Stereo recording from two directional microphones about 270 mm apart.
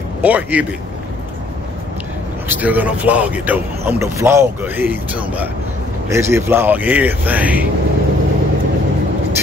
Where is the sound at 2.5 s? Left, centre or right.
Centre.